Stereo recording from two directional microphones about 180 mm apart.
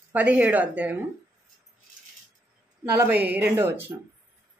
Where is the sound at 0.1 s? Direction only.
10° right (ahead or behind).